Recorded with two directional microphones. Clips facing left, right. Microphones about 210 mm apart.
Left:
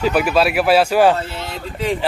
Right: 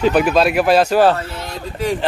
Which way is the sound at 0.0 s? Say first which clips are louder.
Right 2 dB; 5° left (ahead or behind).